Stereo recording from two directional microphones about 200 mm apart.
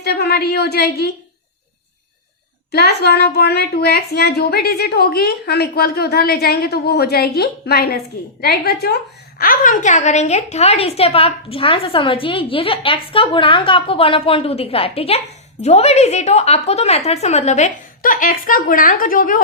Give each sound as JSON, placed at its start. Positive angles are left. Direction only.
{"t": 0.0, "sound": "a woman's voice", "side_deg": 55}
{"t": 2.7, "sound": "a woman's voice", "side_deg": 55}